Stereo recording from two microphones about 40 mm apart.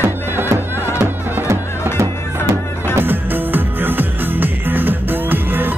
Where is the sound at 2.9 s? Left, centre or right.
Right.